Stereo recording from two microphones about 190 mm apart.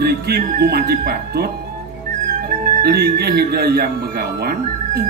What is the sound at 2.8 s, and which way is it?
A woman's voice, 55° right (ahead or behind).